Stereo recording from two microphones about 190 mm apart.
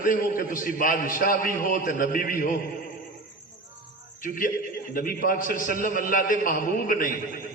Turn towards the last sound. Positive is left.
turn(degrees=45)  # may be behind; listen again after turning